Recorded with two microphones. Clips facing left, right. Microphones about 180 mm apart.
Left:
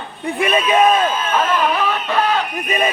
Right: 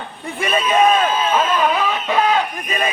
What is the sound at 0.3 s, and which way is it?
Speech, centre (ahead or behind).